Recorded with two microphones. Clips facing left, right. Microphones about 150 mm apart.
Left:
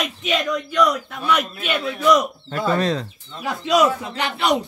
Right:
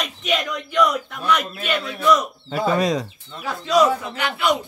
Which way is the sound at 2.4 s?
10° right (ahead or behind).